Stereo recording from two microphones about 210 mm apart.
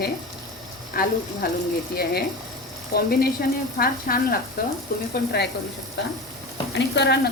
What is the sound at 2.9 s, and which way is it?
Speech, 45° left (ahead or behind).